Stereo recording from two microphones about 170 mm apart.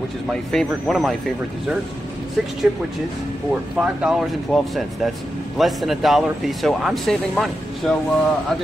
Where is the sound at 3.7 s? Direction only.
5° right (ahead or behind).